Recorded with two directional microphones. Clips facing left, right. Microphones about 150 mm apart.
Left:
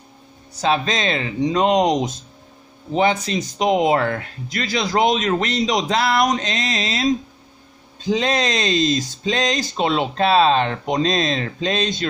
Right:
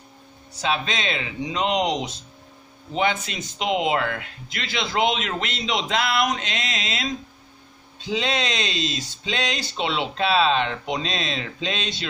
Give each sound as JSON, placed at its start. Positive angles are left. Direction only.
{"t": 0.6, "sound": "speech", "side_deg": 40}